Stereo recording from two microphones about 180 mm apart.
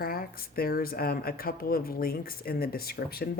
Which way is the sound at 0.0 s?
55° left (ahead or behind).